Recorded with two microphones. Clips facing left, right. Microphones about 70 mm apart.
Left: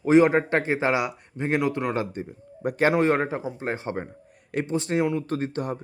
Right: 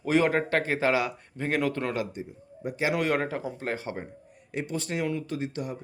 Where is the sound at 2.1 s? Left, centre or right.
Left.